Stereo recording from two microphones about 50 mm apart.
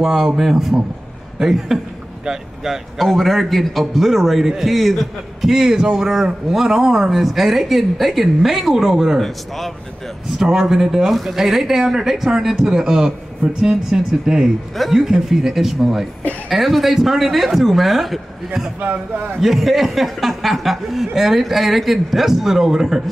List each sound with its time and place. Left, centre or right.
0.0 s a man's voice: centre
18.8 s a man's voice: right
19.4 s a man's voice: centre